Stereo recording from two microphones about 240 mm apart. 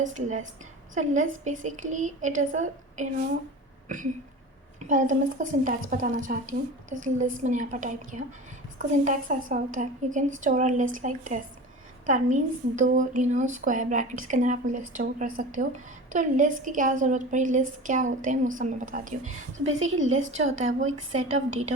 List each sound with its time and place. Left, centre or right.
0.0 s a woman's voice: right
3.8 s a sound: right
4.9 s a woman's voice: right
19.6 s a woman's voice: right
21.1 s a woman's voice: right